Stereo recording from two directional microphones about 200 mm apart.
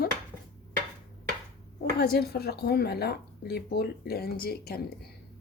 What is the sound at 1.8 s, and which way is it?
Speech, 50° left (ahead or behind).